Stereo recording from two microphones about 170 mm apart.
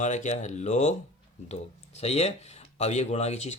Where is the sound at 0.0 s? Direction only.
45° left (ahead or behind).